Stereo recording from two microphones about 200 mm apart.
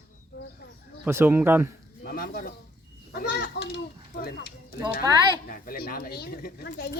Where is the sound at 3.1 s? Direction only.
55° left (ahead or behind).